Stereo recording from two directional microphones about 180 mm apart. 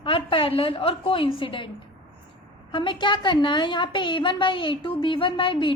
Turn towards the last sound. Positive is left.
turn(degrees=25)  # may be behind; listen again after turning